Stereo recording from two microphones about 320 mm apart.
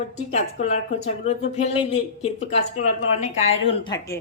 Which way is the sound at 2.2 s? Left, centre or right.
Left.